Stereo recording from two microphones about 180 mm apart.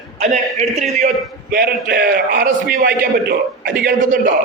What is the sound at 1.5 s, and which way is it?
A man's voice, 55° right (ahead or behind).